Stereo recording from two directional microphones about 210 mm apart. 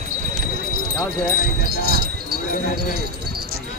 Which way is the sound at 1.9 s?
45° right (ahead or behind).